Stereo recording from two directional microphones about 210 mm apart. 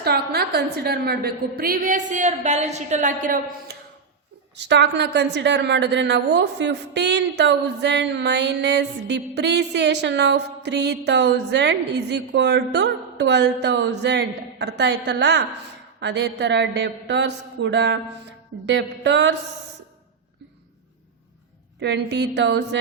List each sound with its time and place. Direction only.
0.0 s a woman's voice: 50° right (ahead or behind)
4.5 s a woman's voice: 55° right (ahead or behind)
21.8 s a woman's voice: 55° right (ahead or behind)